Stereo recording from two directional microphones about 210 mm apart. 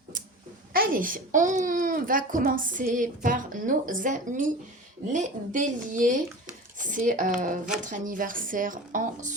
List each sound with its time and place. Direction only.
0.7 s a child's voice: 45° right (ahead or behind)